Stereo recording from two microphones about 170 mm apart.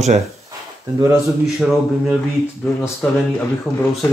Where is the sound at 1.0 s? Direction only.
15° right (ahead or behind).